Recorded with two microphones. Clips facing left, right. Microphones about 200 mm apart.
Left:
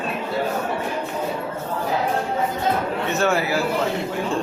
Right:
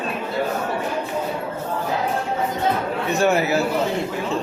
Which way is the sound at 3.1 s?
20° right (ahead or behind).